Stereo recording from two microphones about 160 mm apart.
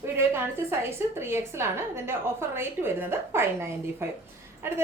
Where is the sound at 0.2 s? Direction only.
15° right (ahead or behind).